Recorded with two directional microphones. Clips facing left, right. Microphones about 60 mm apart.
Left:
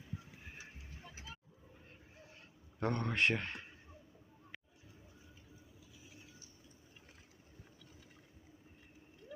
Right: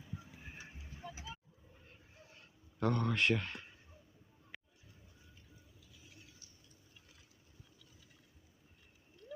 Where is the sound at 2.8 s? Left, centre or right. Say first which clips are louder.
Right 1 dB; left.